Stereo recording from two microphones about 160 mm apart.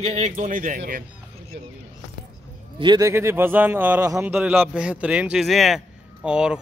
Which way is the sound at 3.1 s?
15° right (ahead or behind).